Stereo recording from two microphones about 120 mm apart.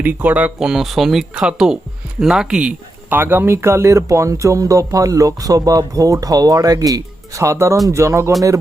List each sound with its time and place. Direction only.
0.0 s speech: 15° right (ahead or behind)